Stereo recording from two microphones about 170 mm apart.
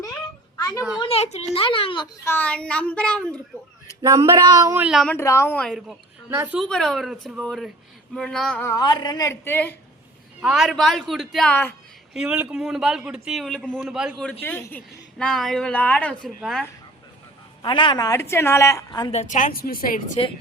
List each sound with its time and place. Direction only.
0.5 s children playing: 20° left (ahead or behind)
0.9 s a child's voice: 35° left (ahead or behind)
2.2 s speech: 10° left (ahead or behind)
4.2 s speech: 25° right (ahead or behind); by 5.0 s 5° right (ahead or behind)
5.0 s speech: 15° left (ahead or behind)
6.3 s a woman's voice: 15° right (ahead or behind)
6.6 s a man's voice: 5° left (ahead or behind)
8.6 s a woman's voice: 20° left (ahead or behind)
10.4 s a man's voice: centre (ahead or behind)
12.1 s a man's voice: 5° right (ahead or behind)
14.4 s a man's voice: 10° left (ahead or behind)
17.6 s a woman's voice: 30° left (ahead or behind)
19.1 s a woman's voice: 45° left (ahead or behind)